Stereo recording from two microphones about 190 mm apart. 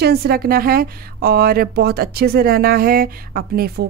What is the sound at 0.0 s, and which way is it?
A woman's voice, 55° right (ahead or behind).